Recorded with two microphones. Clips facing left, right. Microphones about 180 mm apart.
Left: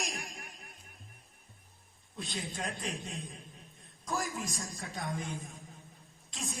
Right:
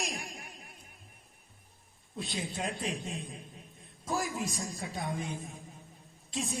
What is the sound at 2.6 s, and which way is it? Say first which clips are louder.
A man's voice: right 4 dB; 20° right (ahead or behind).